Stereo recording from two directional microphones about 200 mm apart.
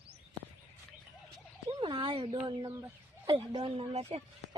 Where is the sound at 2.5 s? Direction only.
20° right (ahead or behind).